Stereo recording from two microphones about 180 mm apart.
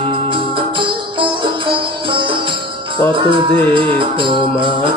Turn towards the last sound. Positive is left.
turn(degrees=-30)  # may be behind; listen again after turning